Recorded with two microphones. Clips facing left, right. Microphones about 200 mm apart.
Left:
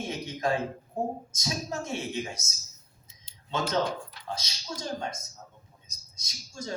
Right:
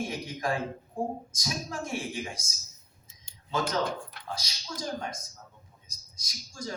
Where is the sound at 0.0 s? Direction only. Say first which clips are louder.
Left 2 dB; 25° left (ahead or behind).